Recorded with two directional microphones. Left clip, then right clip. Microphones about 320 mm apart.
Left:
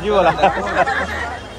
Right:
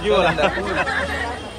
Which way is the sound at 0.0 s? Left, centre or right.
Left.